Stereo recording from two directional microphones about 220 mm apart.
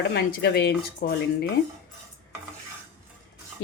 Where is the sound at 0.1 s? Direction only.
45° left (ahead or behind).